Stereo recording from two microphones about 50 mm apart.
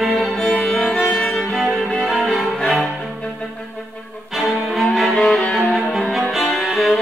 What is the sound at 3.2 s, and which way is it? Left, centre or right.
Music, centre.